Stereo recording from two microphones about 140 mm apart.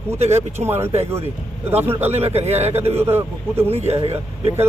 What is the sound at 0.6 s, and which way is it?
Speech, 15° right (ahead or behind).